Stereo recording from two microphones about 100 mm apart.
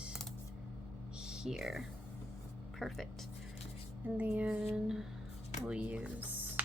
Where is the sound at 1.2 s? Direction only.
5° right (ahead or behind).